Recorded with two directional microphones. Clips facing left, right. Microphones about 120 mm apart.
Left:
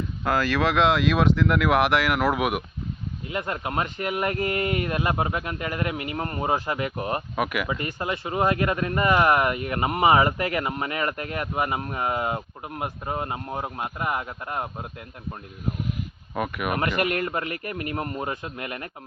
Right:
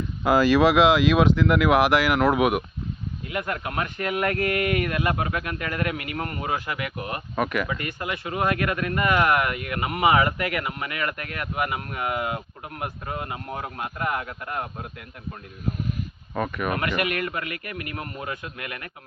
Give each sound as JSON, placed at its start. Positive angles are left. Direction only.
{"t": 0.3, "sound": "speech", "side_deg": -15}
{"t": 3.2, "sound": "speech", "side_deg": 25}
{"t": 7.3, "sound": "speech", "side_deg": 10}
{"t": 7.7, "sound": "speech", "side_deg": 30}
{"t": 16.3, "sound": "speech", "side_deg": 10}
{"t": 16.7, "sound": "speech", "side_deg": 35}